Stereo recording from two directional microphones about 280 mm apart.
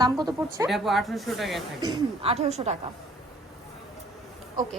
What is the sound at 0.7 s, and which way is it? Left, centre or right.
Speech, centre.